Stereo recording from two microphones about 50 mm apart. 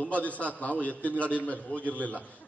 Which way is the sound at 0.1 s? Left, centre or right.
Left.